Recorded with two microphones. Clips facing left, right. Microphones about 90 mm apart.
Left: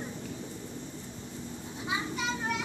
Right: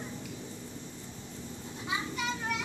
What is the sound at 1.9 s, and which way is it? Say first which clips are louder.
Child singing: left 1 dB; 25° left (ahead or behind).